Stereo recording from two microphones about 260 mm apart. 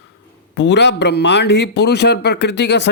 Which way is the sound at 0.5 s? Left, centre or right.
Left.